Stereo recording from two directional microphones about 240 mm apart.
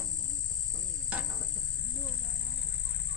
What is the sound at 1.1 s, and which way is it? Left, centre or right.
Insect, centre.